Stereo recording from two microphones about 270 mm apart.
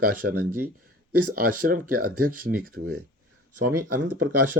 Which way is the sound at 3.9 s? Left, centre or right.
Right.